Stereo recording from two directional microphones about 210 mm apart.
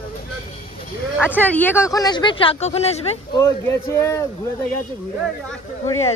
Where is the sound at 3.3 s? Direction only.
15° left (ahead or behind).